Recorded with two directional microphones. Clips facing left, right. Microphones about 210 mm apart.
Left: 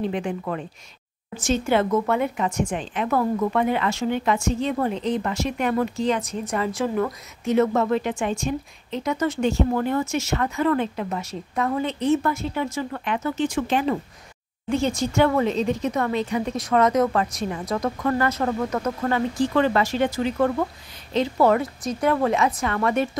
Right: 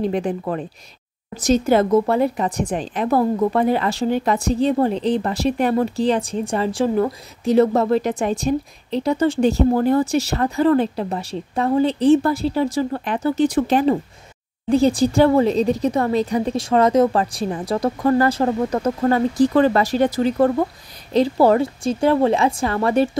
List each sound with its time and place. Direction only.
0.0 s speech: 40° right (ahead or behind)